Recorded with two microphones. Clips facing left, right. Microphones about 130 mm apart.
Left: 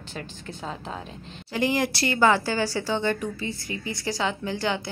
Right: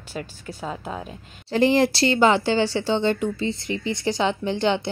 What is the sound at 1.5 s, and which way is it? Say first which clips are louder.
Speech: right 6 dB; 30° right (ahead or behind).